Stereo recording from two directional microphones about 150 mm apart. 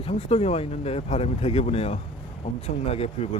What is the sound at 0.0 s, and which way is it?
Speech, 45° left (ahead or behind).